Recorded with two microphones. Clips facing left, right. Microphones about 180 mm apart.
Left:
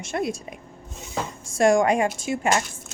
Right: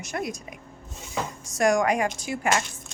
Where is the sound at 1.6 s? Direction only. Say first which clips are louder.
Left 3 dB; 25° left (ahead or behind).